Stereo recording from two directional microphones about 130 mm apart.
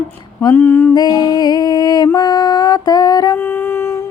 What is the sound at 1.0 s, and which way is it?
Music, 30° left (ahead or behind).